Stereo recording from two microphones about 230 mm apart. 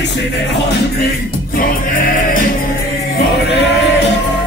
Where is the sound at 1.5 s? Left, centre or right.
Left.